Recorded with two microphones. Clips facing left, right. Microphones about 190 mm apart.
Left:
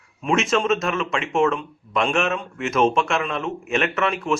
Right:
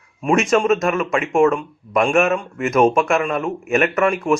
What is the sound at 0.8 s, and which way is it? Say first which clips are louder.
A man's voice: right 5 dB; 45° right (ahead or behind).